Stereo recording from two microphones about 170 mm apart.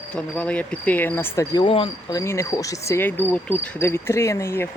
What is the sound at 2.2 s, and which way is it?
Speech, 15° left (ahead or behind).